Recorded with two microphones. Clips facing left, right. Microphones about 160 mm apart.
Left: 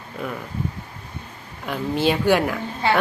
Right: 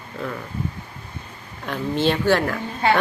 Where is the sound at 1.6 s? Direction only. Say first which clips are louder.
Even; 5° left (ahead or behind).